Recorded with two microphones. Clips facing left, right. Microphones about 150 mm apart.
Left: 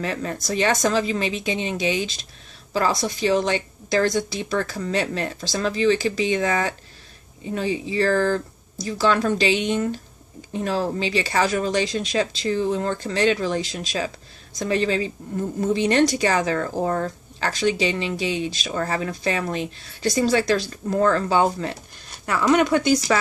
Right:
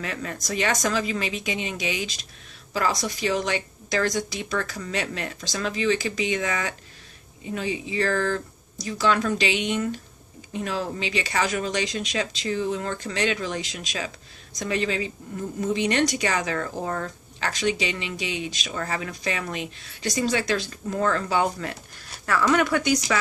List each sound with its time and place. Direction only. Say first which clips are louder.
0.0 s speech: left 5 dB; 30° left (ahead or behind)